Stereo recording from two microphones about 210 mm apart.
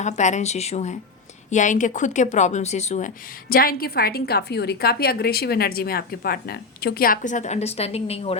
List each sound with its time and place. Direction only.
0.0 s speech: 35° left (ahead or behind)
3.5 s a woman's voice: 45° left (ahead or behind); by 8.4 s 30° left (ahead or behind)